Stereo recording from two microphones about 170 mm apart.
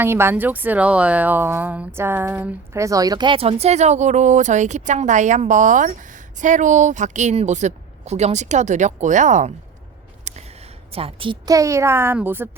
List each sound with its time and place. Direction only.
0.0 s a woman's voice: 15° right (ahead or behind)